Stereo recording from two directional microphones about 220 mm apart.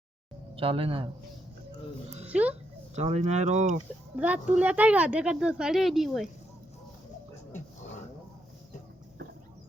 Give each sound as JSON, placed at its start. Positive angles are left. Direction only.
{"t": 0.5, "sound": "speech", "side_deg": -25}
{"t": 2.2, "sound": "speech", "side_deg": -5}
{"t": 2.9, "sound": "speech", "side_deg": -30}
{"t": 4.2, "sound": "speech", "side_deg": -5}